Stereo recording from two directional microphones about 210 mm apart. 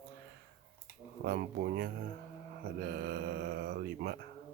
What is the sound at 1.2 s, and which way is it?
Speech, 45° right (ahead or behind).